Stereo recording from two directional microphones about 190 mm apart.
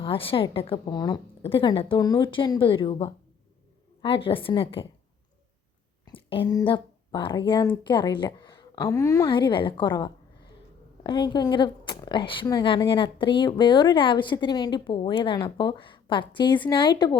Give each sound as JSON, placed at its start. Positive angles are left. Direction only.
{"t": 0.0, "sound": "a woman's voice", "side_deg": 30}
{"t": 6.1, "sound": "a woman's voice", "side_deg": 25}